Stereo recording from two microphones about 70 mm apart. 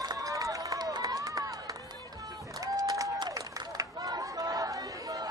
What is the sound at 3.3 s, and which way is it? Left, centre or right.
Chatter, right.